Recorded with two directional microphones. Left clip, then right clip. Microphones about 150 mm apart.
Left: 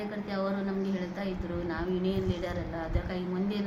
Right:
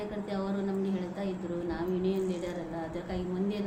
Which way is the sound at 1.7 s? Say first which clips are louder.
Even; 5° right (ahead or behind).